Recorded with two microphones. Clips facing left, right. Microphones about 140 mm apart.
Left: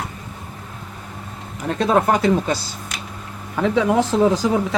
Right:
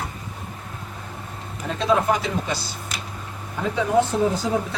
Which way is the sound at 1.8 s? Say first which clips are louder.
Left 4 dB; 50° left (ahead or behind).